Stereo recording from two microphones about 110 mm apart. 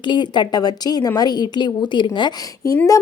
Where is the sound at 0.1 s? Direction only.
45° left (ahead or behind).